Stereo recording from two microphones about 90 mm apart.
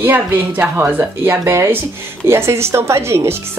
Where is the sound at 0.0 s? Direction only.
20° right (ahead or behind).